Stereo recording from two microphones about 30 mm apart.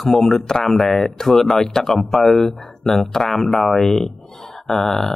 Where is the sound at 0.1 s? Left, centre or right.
Centre.